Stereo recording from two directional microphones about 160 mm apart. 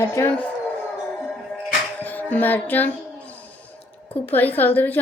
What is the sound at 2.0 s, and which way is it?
Music, 10° left (ahead or behind).